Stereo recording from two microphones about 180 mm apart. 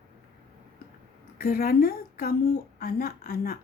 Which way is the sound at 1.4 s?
55° left (ahead or behind).